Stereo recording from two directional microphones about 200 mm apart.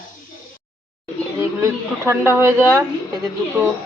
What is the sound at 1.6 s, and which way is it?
Speech, 15° right (ahead or behind).